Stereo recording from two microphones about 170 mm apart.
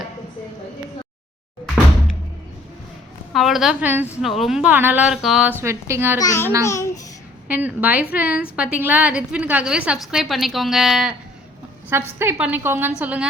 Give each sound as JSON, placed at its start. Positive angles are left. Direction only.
{"t": 3.3, "sound": "a woman's voice", "side_deg": 0}
{"t": 6.1, "sound": "a child's voice", "side_deg": 20}
{"t": 7.4, "sound": "a woman's voice", "side_deg": -10}
{"t": 11.9, "sound": "a woman's voice", "side_deg": -15}